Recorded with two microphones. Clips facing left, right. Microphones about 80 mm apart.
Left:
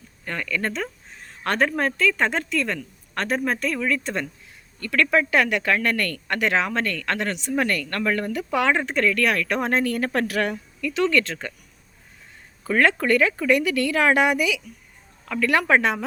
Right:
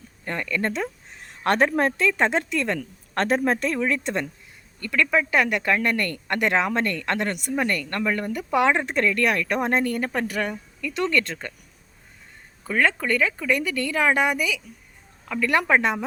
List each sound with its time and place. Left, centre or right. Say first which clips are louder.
0.3 s speech: right 1 dB; right
4.9 s speech: left 2 dB; centre
12.6 s a woman's voice: left 3 dB; centre
15.3 s speech: left 1 dB; centre